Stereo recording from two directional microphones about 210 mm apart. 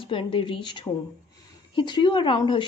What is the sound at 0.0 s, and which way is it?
Speech, 25° left (ahead or behind).